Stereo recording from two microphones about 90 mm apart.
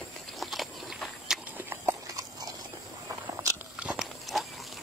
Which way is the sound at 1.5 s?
25° right (ahead or behind).